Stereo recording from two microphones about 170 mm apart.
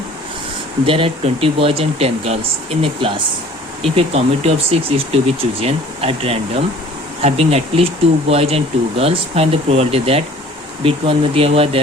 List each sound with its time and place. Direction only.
0.9 s speech: 30° right (ahead or behind)